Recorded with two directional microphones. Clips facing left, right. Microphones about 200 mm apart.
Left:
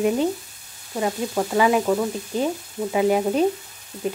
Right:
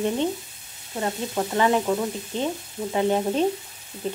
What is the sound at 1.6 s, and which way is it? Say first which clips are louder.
A woman's voice: left 3 dB; 10° left (ahead or behind).